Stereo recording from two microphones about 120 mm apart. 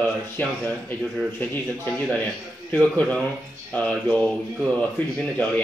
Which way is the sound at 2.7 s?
10° left (ahead or behind).